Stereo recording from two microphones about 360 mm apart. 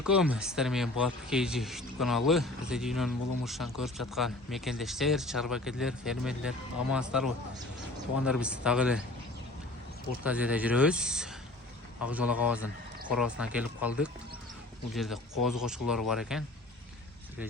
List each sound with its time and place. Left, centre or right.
0.0 s speech: centre
10.2 s speech: centre